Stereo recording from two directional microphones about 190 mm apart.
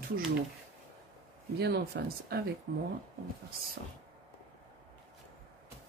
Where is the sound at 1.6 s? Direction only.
60° right (ahead or behind).